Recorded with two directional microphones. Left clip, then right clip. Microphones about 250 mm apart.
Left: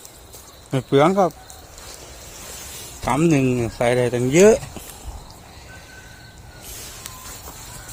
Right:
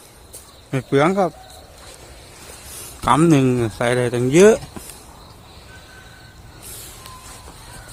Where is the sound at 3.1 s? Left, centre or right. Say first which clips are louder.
Right 4 dB; centre.